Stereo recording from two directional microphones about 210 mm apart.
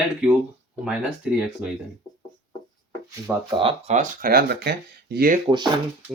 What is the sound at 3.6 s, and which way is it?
Speech, 30° right (ahead or behind).